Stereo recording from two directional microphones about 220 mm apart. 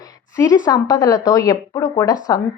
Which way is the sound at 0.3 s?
15° left (ahead or behind).